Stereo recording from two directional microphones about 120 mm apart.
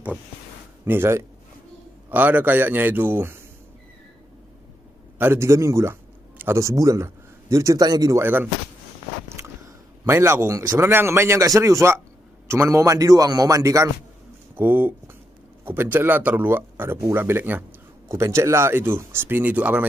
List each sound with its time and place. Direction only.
0.8 s a man's voice: 20° right (ahead or behind)
5.2 s speech: 20° right (ahead or behind)
10.0 s a man's voice: 20° right (ahead or behind)